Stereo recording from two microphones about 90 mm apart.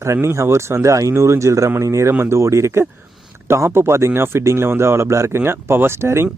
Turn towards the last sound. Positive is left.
turn(degrees=-30)  # may be behind; listen again after turning